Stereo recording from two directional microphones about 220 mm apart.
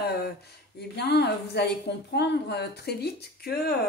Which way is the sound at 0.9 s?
50° left (ahead or behind).